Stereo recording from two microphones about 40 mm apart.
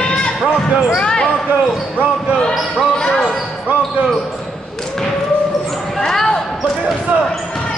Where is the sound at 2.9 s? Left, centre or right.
Centre.